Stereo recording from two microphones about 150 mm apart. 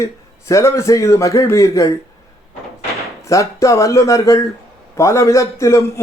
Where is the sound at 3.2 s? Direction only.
20° left (ahead or behind).